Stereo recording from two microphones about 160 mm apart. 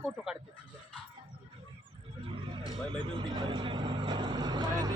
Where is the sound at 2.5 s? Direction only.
30° right (ahead or behind).